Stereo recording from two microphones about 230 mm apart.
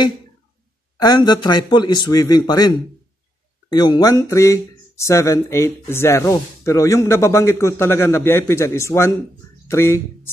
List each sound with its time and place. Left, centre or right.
0.9 s speech: centre